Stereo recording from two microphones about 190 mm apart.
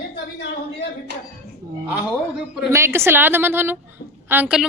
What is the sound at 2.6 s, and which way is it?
A woman's voice, 15° right (ahead or behind).